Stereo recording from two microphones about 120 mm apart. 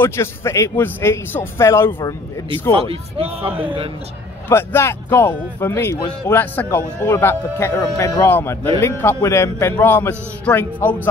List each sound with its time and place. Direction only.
0.0 s a man's voice: 20° left (ahead or behind)
2.9 s speech: 50° right (ahead or behind)
4.5 s a man's voice: 20° left (ahead or behind)